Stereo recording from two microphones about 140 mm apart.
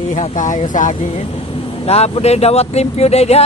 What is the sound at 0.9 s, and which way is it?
Speech, 45° left (ahead or behind).